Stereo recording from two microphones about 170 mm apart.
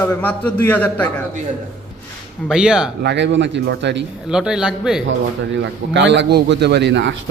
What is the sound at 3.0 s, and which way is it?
A man's voice, 90° right.